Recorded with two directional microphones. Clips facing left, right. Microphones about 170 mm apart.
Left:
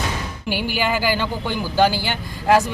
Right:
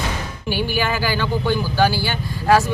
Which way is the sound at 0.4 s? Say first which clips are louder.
Right 1 dB; 15° left (ahead or behind).